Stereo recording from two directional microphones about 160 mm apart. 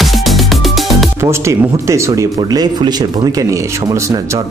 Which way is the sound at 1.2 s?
15° right (ahead or behind).